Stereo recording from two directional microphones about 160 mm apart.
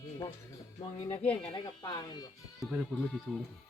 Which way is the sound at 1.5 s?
30° left (ahead or behind).